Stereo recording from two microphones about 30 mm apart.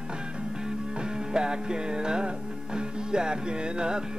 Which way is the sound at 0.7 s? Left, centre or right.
Right.